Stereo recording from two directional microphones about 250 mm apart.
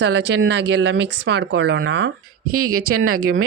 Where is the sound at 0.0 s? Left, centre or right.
Right.